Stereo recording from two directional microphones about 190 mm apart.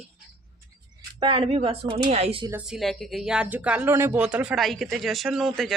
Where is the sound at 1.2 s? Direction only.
30° right (ahead or behind).